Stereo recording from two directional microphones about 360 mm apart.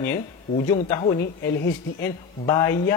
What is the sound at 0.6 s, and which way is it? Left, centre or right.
Speech, centre.